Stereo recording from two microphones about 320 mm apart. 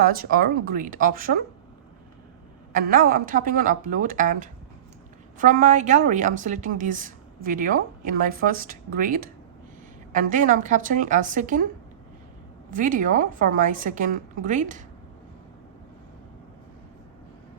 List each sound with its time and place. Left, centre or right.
0.0 s speech: right
2.7 s speech: right
12.7 s speech: right